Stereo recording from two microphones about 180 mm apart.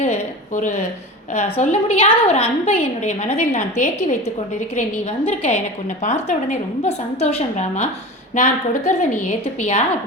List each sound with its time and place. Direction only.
0.0 s a woman's voice: 40° left (ahead or behind)